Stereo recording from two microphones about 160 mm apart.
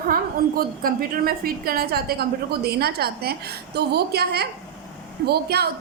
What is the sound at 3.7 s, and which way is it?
A woman's voice, 90° right.